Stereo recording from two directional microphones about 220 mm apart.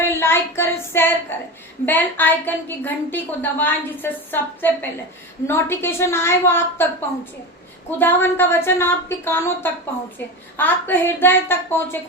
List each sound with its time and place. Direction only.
0.1 s child singing: 10° left (ahead or behind)
1.3 s a woman's voice: 10° left (ahead or behind)
7.9 s a woman's voice: 10° left (ahead or behind)